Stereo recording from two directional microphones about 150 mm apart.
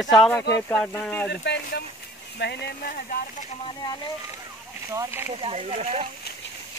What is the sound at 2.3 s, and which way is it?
Speech, 90° left.